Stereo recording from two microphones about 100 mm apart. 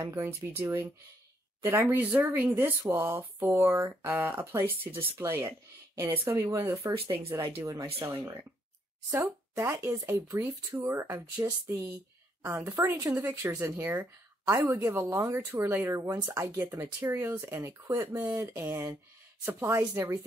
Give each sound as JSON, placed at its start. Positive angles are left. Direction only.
{"t": 0.0, "sound": "speech", "side_deg": -25}
{"t": 9.6, "sound": "speech", "side_deg": -25}
{"t": 20.0, "sound": "speech", "side_deg": -25}